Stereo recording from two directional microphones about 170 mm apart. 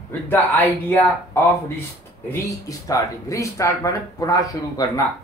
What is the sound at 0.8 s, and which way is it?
Speech, 15° left (ahead or behind).